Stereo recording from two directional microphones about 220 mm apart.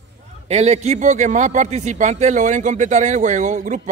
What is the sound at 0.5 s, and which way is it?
Speech, 30° right (ahead or behind).